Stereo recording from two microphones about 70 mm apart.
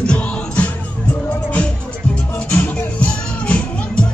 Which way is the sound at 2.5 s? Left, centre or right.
Centre.